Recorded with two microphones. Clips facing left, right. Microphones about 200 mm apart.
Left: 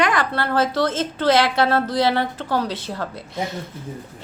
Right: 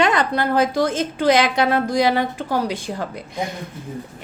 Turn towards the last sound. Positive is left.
turn(degrees=-15)  # may be behind; listen again after turning